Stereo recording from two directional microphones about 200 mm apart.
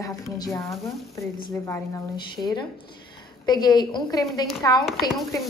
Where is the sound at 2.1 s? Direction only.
20° left (ahead or behind).